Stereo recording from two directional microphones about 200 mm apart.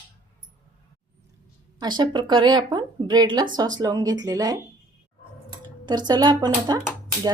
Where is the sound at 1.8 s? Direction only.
20° right (ahead or behind).